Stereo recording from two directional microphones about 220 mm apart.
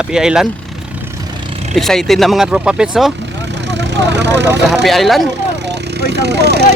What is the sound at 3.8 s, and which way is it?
Speech, 50° right (ahead or behind).